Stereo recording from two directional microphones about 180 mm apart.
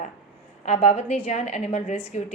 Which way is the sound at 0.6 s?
35° left (ahead or behind).